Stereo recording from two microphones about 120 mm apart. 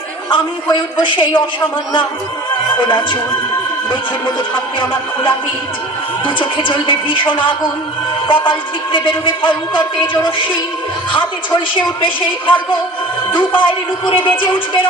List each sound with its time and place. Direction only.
0.3 s a man's voice: 40° left (ahead or behind)
2.8 s a man's voice: 40° left (ahead or behind)
6.2 s music: 45° left (ahead or behind)
11.7 s music: 45° left (ahead or behind)
13.6 s music: 45° left (ahead or behind)